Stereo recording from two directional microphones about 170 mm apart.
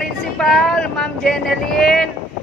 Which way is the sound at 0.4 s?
Centre (ahead or behind).